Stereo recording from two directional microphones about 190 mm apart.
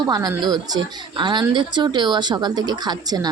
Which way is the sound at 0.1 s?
20° right (ahead or behind).